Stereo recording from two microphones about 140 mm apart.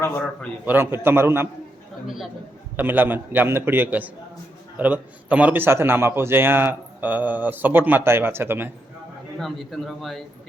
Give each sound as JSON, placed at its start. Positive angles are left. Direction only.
{"t": 0.6, "sound": "a man's voice", "side_deg": -15}
{"t": 2.0, "sound": "a man's voice", "side_deg": 0}
{"t": 2.7, "sound": "a man's voice", "side_deg": -15}
{"t": 9.4, "sound": "a man's voice", "side_deg": 0}